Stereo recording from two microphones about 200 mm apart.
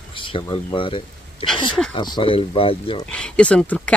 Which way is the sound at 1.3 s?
Centre (ahead or behind).